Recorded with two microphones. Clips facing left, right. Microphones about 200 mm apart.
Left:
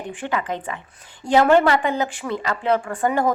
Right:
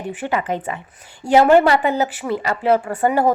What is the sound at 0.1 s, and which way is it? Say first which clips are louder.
A woman's voice: right 4 dB; 10° right (ahead or behind).